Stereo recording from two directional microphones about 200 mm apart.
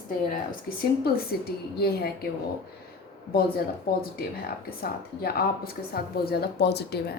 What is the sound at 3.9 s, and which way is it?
Speech, 50° left (ahead or behind).